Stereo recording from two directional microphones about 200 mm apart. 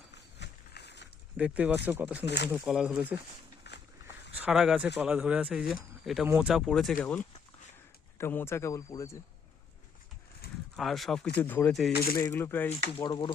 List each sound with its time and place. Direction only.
0.1 s a sound: 55° left (ahead or behind)
1.4 s speech: 5° right (ahead or behind)
2.2 s speech: 60° left (ahead or behind)
2.5 s speech: centre (ahead or behind)
3.6 s a sound: 60° left (ahead or behind)
4.4 s speech: 5° right (ahead or behind)
8.2 s speech: 10° left (ahead or behind)
10.8 s speech: centre (ahead or behind)
12.1 s speech: 15° left (ahead or behind)
12.9 s speech: 25° left (ahead or behind)